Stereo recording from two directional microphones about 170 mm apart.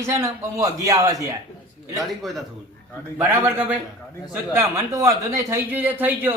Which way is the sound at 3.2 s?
15° right (ahead or behind).